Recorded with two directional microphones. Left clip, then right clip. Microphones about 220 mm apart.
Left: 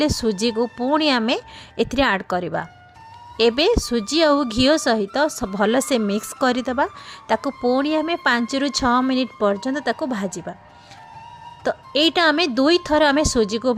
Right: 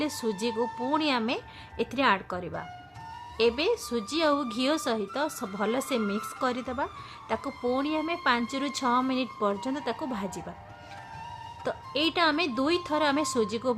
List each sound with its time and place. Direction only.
0.0 s a woman's voice: 30° left (ahead or behind)
11.6 s a woman's voice: 35° left (ahead or behind)